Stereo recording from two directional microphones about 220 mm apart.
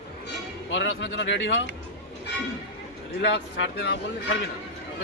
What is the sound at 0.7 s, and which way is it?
Speech, 55° left (ahead or behind).